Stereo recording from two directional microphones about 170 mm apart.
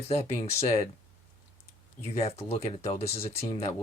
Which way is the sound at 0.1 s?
40° left (ahead or behind).